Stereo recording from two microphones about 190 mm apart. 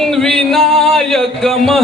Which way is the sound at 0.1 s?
Centre (ahead or behind).